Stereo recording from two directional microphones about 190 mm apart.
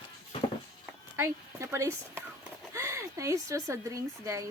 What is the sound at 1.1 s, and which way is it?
Speech, 15° right (ahead or behind).